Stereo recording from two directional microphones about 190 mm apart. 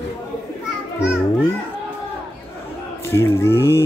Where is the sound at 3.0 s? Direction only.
15° left (ahead or behind).